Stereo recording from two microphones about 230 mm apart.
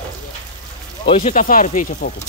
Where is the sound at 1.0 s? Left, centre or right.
Left.